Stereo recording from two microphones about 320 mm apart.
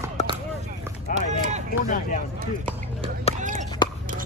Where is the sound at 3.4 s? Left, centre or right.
Right.